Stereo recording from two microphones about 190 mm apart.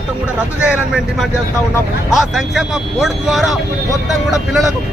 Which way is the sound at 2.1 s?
Centre (ahead or behind).